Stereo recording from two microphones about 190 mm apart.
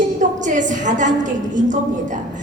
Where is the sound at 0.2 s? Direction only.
40° right (ahead or behind).